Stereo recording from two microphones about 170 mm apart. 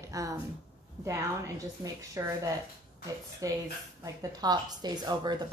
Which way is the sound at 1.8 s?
20° right (ahead or behind).